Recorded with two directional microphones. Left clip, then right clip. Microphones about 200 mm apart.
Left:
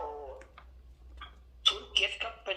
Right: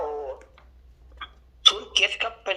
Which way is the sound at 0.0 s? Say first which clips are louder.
Right 10 dB; 55° right (ahead or behind).